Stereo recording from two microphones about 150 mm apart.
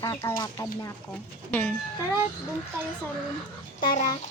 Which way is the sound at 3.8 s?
55° left (ahead or behind).